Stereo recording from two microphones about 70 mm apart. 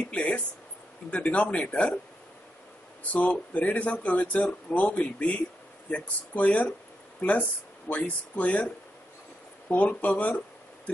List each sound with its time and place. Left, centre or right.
0.1 s speech: centre
3.0 s speech: centre
9.7 s speech: left